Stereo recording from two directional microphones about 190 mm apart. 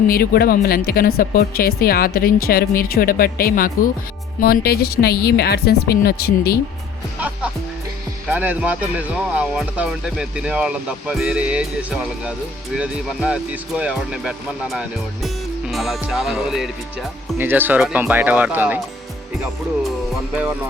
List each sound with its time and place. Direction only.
0.1 s speech: 50° left (ahead or behind)
7.2 s speech: 10° right (ahead or behind)